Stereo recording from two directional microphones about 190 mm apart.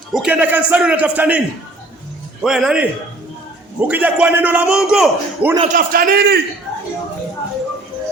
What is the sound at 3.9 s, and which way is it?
A man's voice, 10° right (ahead or behind).